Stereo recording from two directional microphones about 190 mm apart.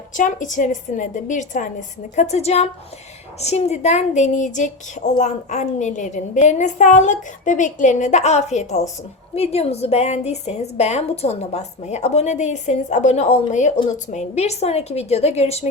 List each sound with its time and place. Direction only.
0.2 s a woman's voice: 40° left (ahead or behind)